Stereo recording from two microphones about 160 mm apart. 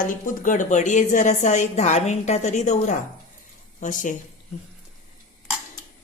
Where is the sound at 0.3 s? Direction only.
55° left (ahead or behind).